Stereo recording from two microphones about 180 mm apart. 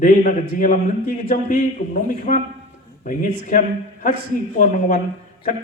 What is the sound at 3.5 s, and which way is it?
Speech, 45° left (ahead or behind).